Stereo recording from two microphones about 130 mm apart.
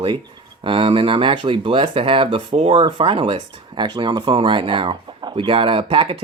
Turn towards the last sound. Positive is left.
turn(degrees=-45)  # may be behind; listen again after turning